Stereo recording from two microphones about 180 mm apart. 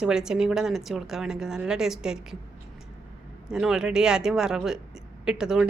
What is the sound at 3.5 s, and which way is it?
A woman's voice, 5° right (ahead or behind).